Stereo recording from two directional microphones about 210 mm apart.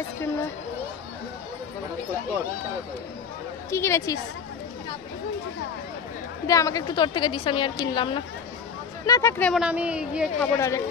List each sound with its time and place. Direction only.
3.7 s a woman's voice: 10° left (ahead or behind)
6.4 s a woman's voice: 15° left (ahead or behind)
9.4 s a woman's voice: centre (ahead or behind)
10.5 s a woman's voice: 15° left (ahead or behind)